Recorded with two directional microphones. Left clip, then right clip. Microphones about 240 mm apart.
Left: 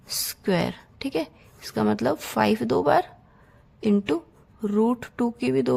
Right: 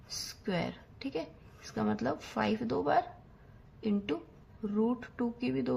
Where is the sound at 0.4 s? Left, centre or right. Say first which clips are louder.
Left 11 dB; left.